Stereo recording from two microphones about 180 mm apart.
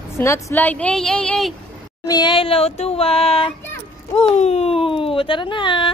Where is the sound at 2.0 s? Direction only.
25° left (ahead or behind).